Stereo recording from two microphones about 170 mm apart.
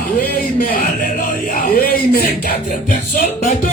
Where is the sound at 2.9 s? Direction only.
45° left (ahead or behind).